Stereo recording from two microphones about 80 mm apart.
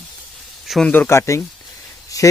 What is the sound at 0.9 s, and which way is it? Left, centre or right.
Speech, left.